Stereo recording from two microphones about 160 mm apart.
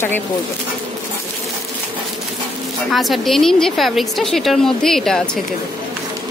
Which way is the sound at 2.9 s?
Centre (ahead or behind).